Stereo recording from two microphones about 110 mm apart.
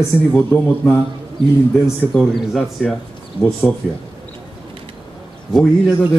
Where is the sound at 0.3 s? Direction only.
20° left (ahead or behind).